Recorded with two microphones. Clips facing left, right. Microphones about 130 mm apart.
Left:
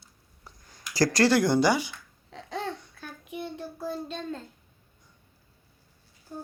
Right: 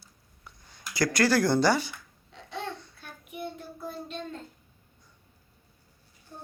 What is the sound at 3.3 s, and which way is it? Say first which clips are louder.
Child singing: left 2 dB; 90° left.